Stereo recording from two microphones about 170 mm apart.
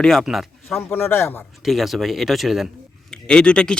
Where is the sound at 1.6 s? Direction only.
Centre (ahead or behind).